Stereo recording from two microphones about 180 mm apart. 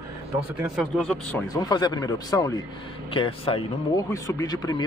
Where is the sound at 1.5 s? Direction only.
20° left (ahead or behind).